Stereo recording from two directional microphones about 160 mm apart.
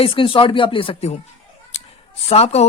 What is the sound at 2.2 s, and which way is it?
Speech, 40° left (ahead or behind).